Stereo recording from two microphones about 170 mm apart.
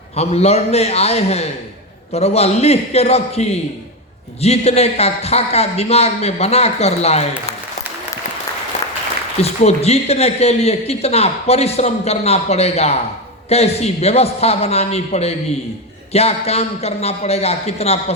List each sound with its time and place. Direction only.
0.2 s a man's voice: 40° left (ahead or behind)
9.4 s a man's voice: 40° left (ahead or behind)